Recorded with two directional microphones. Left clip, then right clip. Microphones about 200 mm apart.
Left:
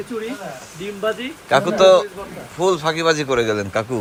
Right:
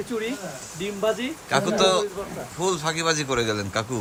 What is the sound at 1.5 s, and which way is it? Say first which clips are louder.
Speech: left 8 dB; 10° right (ahead or behind).